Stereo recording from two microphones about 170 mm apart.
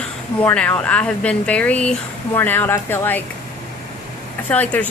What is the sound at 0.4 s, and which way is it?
Speech, 10° left (ahead or behind).